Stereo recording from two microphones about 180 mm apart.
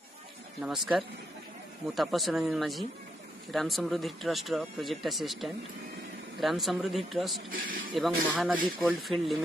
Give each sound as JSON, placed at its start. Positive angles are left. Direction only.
{"t": 0.6, "sound": "speech", "side_deg": 0}
{"t": 7.5, "sound": "speech", "side_deg": -50}
{"t": 7.9, "sound": "speech", "side_deg": 0}